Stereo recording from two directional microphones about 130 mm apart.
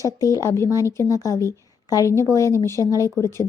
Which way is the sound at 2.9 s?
25° right (ahead or behind).